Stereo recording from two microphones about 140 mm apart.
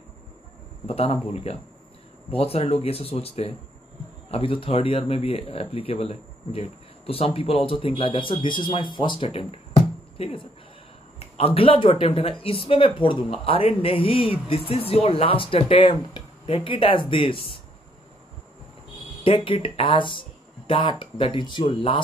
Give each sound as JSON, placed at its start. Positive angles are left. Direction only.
{"t": 0.8, "sound": "speech", "side_deg": 45}
{"t": 19.2, "sound": "speech", "side_deg": 40}